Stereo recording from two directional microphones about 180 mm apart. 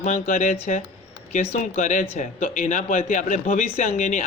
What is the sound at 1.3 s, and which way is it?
Speech, 40° left (ahead or behind).